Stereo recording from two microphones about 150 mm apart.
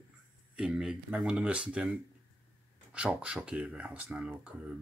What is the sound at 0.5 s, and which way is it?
Speech, 5° right (ahead or behind).